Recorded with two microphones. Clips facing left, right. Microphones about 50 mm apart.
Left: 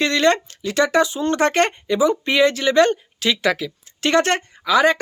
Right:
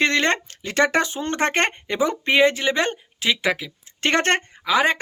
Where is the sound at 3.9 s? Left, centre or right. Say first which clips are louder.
Left 2 dB; right.